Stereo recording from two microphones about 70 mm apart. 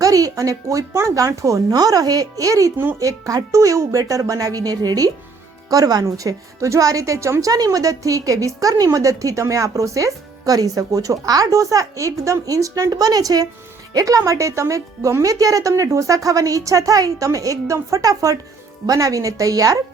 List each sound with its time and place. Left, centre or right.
0.0 s a woman's voice: right
1.7 s a woman's voice: right
12.9 s a woman's voice: right